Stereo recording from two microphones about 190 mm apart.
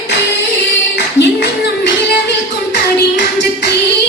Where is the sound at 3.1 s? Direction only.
65° left (ahead or behind).